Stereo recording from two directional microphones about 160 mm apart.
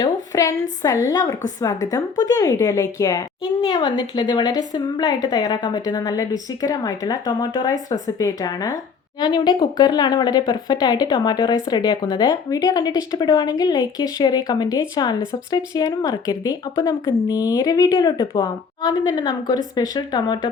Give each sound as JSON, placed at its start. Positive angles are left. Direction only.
{"t": 0.0, "sound": "a woman's voice", "side_deg": 20}
{"t": 17.2, "sound": "speech", "side_deg": -10}
{"t": 17.5, "sound": "speech", "side_deg": 25}